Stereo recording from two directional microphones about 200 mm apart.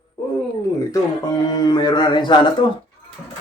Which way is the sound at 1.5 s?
20° left (ahead or behind).